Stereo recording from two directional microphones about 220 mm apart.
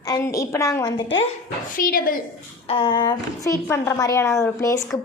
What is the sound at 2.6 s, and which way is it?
A woman's voice, 25° left (ahead or behind).